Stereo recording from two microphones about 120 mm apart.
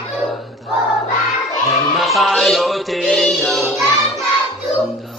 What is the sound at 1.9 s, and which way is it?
Music, centre (ahead or behind).